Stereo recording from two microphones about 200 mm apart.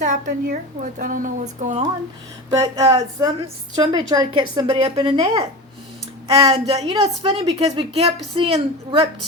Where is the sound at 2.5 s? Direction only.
15° right (ahead or behind).